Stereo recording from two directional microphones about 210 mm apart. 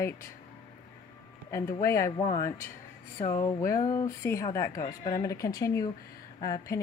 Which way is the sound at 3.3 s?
15° left (ahead or behind).